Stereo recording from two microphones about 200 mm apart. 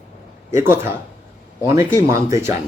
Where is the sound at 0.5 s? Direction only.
10° right (ahead or behind).